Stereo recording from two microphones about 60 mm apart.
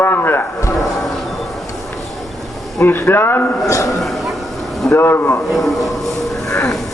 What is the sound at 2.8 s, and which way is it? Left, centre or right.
Speech, left.